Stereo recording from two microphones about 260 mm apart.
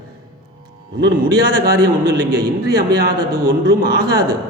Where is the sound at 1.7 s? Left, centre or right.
Right.